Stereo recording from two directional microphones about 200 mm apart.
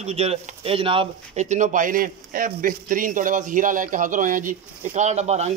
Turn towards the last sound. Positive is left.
turn(degrees=-35)  # may be behind; listen again after turning